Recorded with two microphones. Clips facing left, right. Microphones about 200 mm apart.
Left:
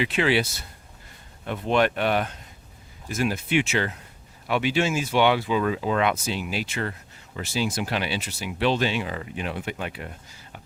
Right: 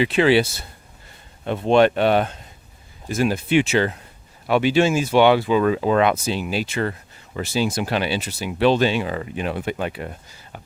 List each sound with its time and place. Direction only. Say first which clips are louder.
0.0 s speech: right 6 dB; 30° right (ahead or behind)
1.5 s speech: right 7 dB; 30° right (ahead or behind)
5.5 s speech: right 6 dB; 50° right (ahead or behind)